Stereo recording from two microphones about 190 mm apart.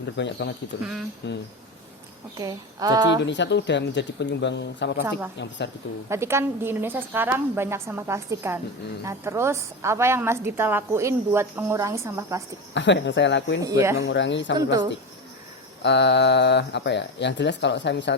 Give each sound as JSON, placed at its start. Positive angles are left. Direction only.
{"t": 0.2, "sound": "speech", "side_deg": 65}
{"t": 2.4, "sound": "speech", "side_deg": -20}
{"t": 3.2, "sound": "speech", "side_deg": 70}
{"t": 6.1, "sound": "a woman's voice", "side_deg": -15}
{"t": 12.7, "sound": "speech", "side_deg": 70}
{"t": 13.6, "sound": "a woman's voice", "side_deg": -15}
{"t": 14.0, "sound": "speech", "side_deg": 70}
{"t": 15.8, "sound": "speech", "side_deg": 65}